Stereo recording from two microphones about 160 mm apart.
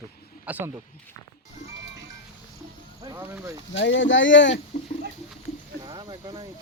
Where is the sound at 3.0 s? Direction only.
20° right (ahead or behind).